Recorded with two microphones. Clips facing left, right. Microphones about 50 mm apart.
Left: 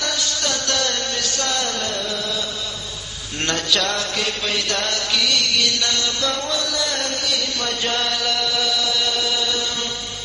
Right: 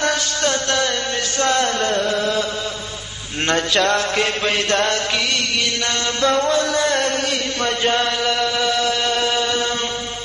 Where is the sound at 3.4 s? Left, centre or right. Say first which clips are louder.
Right 4 dB; right.